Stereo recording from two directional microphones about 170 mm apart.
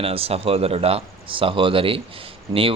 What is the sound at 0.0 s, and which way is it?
Speech, 35° right (ahead or behind).